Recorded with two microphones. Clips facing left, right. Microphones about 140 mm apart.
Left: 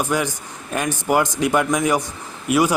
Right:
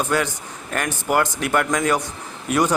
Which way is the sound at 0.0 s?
15° left (ahead or behind).